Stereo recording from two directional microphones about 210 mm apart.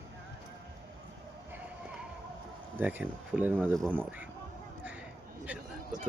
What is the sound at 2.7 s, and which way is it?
Speech, 10° right (ahead or behind).